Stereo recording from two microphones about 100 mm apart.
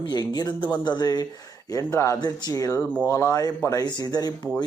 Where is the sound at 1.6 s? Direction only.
30° left (ahead or behind).